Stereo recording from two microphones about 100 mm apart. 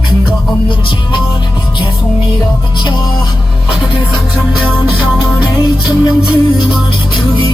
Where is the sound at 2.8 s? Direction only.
50° left (ahead or behind).